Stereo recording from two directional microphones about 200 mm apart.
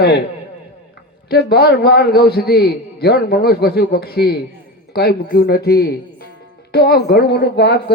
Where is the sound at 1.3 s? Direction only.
50° left (ahead or behind).